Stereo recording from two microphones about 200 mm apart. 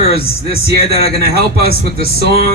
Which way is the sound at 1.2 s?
50° right (ahead or behind).